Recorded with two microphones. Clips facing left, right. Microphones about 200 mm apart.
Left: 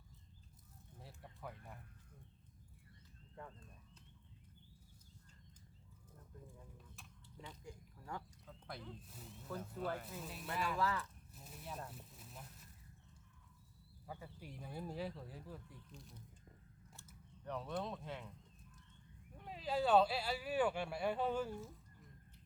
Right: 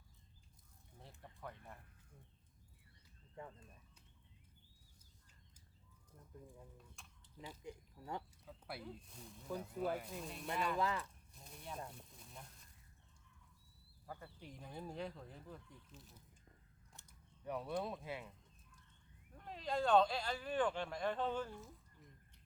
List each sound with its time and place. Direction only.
0.9 s speech: 5° left (ahead or behind)
3.3 s speech: 15° right (ahead or behind)
7.6 s speech: 20° right (ahead or behind)
8.4 s speech: 10° right (ahead or behind)
9.0 s speech: 5° left (ahead or behind)
9.7 s speech: 10° right (ahead or behind)
10.1 s speech: 5° left (ahead or behind)
10.8 s speech: 20° right (ahead or behind)
11.3 s speech: 5° left (ahead or behind)
14.1 s speech: 5° left (ahead or behind)
17.4 s speech: 10° right (ahead or behind)
19.4 s speech: 5° left (ahead or behind)